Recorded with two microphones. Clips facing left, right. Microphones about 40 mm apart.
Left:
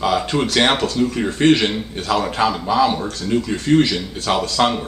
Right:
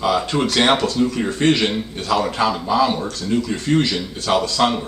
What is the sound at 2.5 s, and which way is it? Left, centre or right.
Speech, centre.